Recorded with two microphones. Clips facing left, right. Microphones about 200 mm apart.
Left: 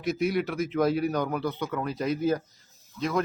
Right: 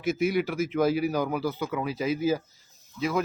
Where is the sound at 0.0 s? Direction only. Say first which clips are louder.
Right 1 dB; centre (ahead or behind).